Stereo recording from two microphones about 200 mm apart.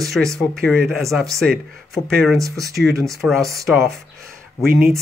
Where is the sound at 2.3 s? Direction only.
15° right (ahead or behind).